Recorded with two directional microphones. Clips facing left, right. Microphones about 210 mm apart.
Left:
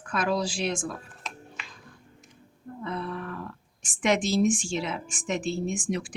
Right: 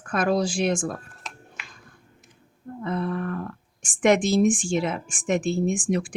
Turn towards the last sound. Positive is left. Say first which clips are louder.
# right 5 dB
turn(degrees=-50)  # may be behind; listen again after turning